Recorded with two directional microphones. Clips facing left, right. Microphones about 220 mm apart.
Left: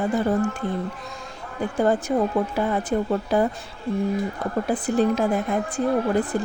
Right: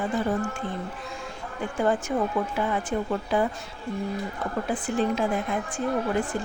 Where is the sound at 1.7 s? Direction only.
35° left (ahead or behind).